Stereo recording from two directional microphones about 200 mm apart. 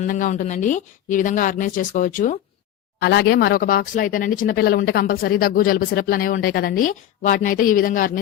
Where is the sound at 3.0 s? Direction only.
55° left (ahead or behind).